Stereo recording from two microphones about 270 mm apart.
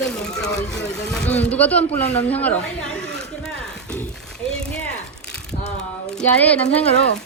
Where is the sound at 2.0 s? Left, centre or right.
Left.